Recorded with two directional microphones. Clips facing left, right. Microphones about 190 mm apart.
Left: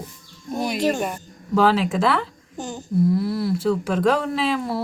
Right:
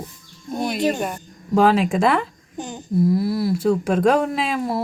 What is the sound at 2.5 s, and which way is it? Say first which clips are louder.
Speech: right 1 dB; 15° right (ahead or behind).